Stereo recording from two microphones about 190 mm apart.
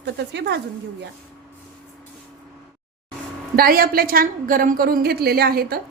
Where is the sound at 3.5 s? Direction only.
50° right (ahead or behind).